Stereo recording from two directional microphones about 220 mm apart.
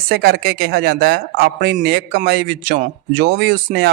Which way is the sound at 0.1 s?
45° right (ahead or behind).